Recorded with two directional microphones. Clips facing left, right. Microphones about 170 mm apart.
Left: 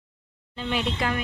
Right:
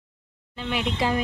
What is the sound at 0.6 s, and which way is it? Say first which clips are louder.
Speech: even; 10° right (ahead or behind).